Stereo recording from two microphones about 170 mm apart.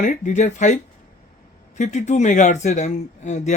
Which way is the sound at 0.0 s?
45° left (ahead or behind).